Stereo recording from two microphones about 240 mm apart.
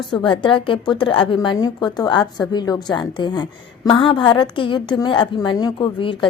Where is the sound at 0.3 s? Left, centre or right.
Left.